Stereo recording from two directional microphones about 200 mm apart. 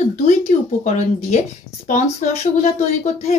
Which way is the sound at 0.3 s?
35° left (ahead or behind).